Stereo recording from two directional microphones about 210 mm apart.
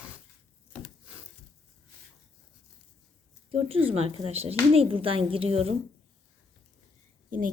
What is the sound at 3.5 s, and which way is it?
Speech, 25° right (ahead or behind).